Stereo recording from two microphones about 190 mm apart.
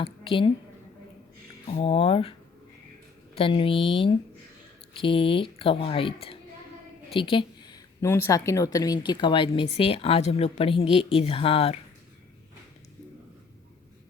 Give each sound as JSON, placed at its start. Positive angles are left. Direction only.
{"t": 0.0, "sound": "a woman's voice", "side_deg": 30}
{"t": 1.7, "sound": "speech", "side_deg": 30}
{"t": 3.3, "sound": "speech", "side_deg": 30}
{"t": 7.2, "sound": "a sound", "side_deg": 25}
{"t": 8.0, "sound": "speech", "side_deg": 15}